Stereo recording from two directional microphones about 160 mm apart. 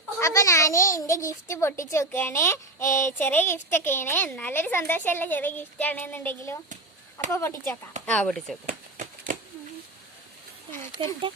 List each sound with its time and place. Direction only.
0.2 s a child's voice: 20° left (ahead or behind); by 8.5 s 5° left (ahead or behind)
8.6 s a sound: 55° right (ahead or behind)
11.0 s speech: 35° right (ahead or behind)